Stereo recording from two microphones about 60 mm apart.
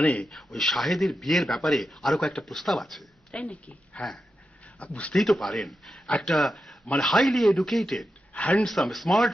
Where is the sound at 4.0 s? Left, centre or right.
Left.